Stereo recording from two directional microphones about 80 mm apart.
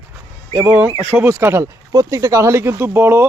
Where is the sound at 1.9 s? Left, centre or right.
Right.